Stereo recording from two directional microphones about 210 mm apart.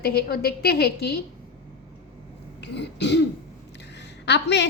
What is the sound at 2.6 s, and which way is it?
Speech, 55° left (ahead or behind).